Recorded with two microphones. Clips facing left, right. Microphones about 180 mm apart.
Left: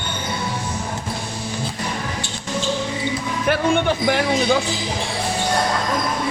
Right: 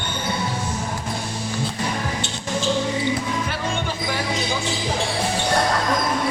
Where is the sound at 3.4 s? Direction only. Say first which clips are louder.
Left 8 dB; 60° left (ahead or behind).